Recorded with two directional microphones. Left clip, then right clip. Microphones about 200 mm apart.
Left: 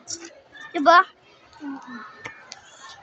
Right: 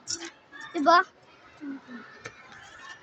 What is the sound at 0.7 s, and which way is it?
Speech, 25° left (ahead or behind).